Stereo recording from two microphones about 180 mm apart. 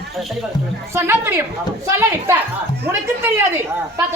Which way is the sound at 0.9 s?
15° right (ahead or behind).